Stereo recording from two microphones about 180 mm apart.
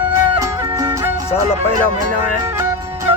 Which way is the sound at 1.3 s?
10° left (ahead or behind).